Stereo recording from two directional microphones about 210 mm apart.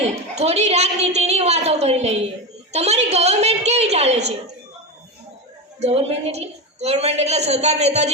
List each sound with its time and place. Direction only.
0.3 s a woman's voice: 30° right (ahead or behind)
2.7 s a sound: 30° right (ahead or behind)
5.8 s a woman's voice: 30° right (ahead or behind)